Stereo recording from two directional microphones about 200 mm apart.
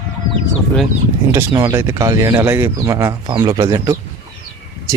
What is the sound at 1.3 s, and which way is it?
Speech, 10° right (ahead or behind).